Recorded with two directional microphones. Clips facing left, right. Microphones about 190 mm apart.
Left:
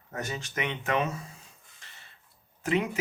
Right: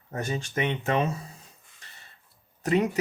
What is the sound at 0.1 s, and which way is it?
Cattle, 30° right (ahead or behind).